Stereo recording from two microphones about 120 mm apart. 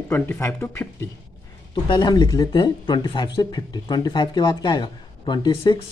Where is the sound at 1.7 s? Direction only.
35° left (ahead or behind).